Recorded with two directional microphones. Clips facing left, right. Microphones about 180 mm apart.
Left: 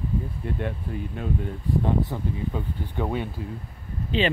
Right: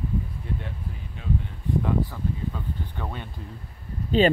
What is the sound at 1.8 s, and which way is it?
Speech, 25° left (ahead or behind).